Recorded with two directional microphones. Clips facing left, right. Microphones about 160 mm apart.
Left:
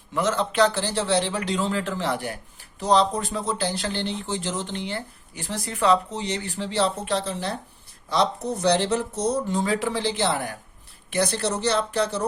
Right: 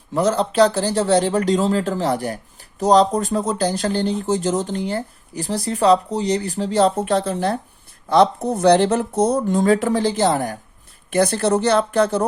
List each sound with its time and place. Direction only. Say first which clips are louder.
0.1 s speech: right 6 dB; 35° right (ahead or behind); by 12.2 s 50° right (ahead or behind)